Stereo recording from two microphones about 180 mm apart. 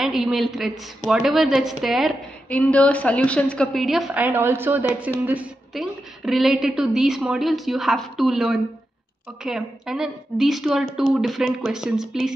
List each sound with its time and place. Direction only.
0.0 s a woman's voice: centre (ahead or behind)